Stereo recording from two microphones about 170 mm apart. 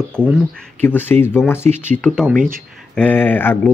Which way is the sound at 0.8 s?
10° left (ahead or behind).